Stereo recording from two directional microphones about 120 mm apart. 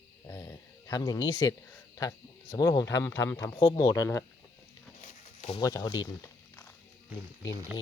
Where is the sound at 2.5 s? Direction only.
30° left (ahead or behind).